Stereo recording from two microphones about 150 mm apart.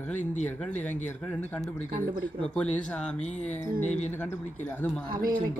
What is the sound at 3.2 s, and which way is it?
Speech, 50° left (ahead or behind).